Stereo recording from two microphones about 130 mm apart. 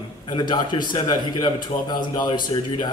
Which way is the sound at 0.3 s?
35° left (ahead or behind).